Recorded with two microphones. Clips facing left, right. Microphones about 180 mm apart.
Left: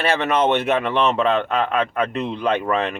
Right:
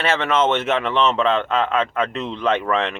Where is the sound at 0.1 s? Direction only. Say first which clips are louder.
Even; 15° left (ahead or behind).